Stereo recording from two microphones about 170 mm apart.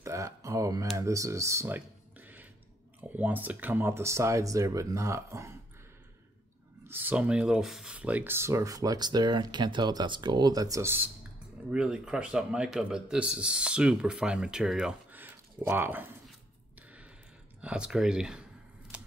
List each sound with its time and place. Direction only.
0.0 s a sound: 20° right (ahead or behind)
3.0 s speech: 10° right (ahead or behind)
6.9 s speech: 10° right (ahead or behind)
17.6 s speech: 5° right (ahead or behind)